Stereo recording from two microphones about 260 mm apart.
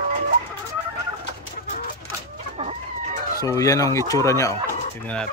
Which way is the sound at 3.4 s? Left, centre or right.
Centre.